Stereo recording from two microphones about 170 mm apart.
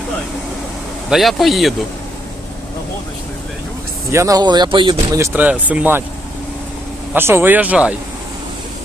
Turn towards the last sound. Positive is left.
turn(degrees=-5)  # may be behind; listen again after turning